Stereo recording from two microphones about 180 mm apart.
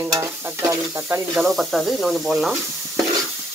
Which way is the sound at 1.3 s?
Centre (ahead or behind).